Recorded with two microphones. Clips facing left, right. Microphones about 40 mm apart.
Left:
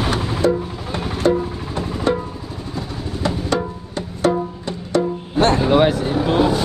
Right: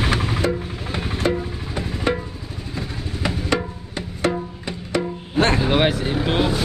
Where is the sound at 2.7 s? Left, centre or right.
Centre.